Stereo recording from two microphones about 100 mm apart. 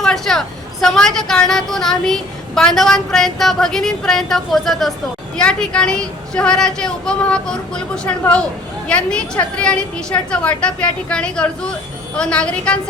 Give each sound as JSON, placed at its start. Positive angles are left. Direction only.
{"t": 0.0, "sound": "a woman's voice", "side_deg": 5}